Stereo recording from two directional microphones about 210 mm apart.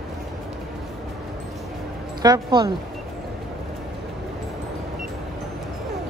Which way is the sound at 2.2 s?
20° right (ahead or behind).